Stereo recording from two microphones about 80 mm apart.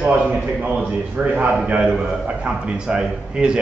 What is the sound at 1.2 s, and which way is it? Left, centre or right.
A man's voice, centre.